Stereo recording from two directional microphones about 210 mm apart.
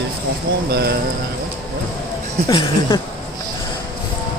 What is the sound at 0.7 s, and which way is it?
Speech, 50° right (ahead or behind).